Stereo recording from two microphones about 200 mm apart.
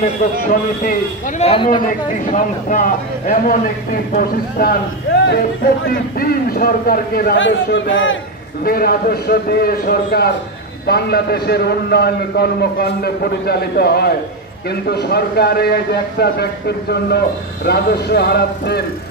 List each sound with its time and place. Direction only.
0.0 s speech: 40° left (ahead or behind)
1.4 s a man's voice: 30° left (ahead or behind)
1.7 s a man's voice: 40° left (ahead or behind)
5.9 s a man's voice: 45° left (ahead or behind)
7.3 s a man's voice: 70° left (ahead or behind)
8.6 s a man's voice: 50° left (ahead or behind)